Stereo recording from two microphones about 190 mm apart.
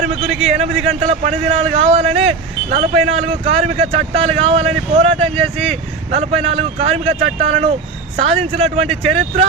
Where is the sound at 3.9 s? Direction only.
35° right (ahead or behind).